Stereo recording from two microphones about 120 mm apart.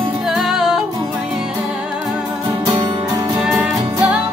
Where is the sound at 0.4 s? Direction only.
5° right (ahead or behind).